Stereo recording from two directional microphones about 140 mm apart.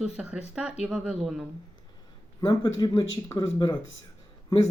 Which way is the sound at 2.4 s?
30° left (ahead or behind).